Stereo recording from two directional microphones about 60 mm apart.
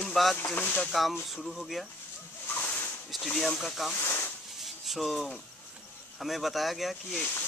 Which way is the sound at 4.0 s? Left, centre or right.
Left.